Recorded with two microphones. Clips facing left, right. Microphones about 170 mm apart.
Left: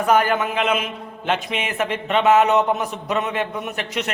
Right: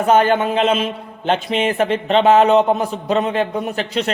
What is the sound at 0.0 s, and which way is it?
A man's voice, 25° right (ahead or behind).